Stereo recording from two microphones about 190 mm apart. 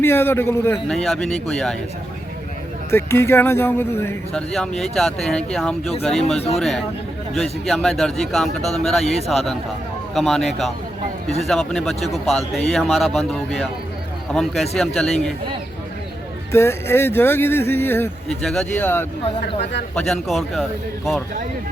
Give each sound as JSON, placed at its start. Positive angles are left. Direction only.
{"t": 0.0, "sound": "speech", "side_deg": 10}
{"t": 0.9, "sound": "a man's voice", "side_deg": 0}
{"t": 2.9, "sound": "speech", "side_deg": 15}
{"t": 4.8, "sound": "a man's voice", "side_deg": 0}
{"t": 6.2, "sound": "speech", "side_deg": 35}
{"t": 6.6, "sound": "a man's voice", "side_deg": 0}
{"t": 16.5, "sound": "a man's voice", "side_deg": 15}